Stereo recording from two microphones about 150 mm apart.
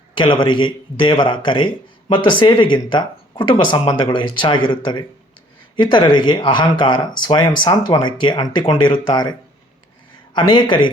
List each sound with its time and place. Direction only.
0.2 s a man's voice: 30° left (ahead or behind)
10.3 s a man's voice: 30° left (ahead or behind)